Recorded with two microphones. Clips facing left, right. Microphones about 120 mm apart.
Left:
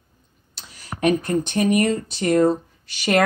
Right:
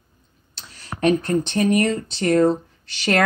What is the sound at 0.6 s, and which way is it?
Speech, 10° left (ahead or behind).